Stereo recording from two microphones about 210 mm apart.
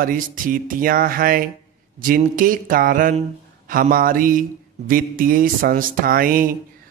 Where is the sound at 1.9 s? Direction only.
40° right (ahead or behind).